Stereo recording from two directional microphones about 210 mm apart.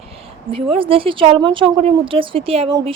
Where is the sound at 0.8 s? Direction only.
25° right (ahead or behind).